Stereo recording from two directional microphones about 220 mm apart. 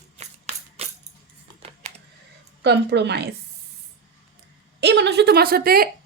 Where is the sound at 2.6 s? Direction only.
50° right (ahead or behind).